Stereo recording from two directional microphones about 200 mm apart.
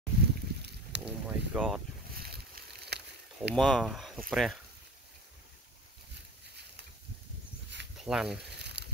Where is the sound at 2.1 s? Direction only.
50° right (ahead or behind).